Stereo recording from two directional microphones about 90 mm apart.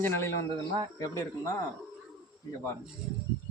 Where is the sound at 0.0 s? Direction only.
30° left (ahead or behind).